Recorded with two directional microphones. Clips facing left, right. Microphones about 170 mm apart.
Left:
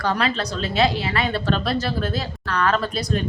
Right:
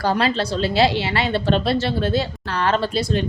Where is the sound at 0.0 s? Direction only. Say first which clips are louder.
Right 3 dB; 30° right (ahead or behind).